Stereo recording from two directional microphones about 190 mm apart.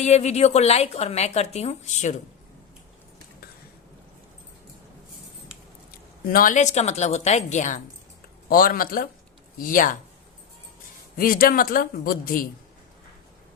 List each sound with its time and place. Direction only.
0.0 s speech: 35° left (ahead or behind)
6.3 s speech: 45° left (ahead or behind)
11.2 s speech: 50° left (ahead or behind)